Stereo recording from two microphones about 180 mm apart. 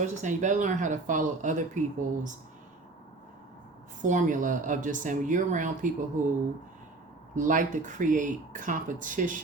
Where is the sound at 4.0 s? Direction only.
45° right (ahead or behind).